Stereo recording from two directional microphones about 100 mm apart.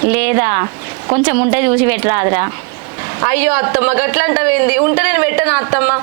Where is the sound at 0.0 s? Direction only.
20° right (ahead or behind).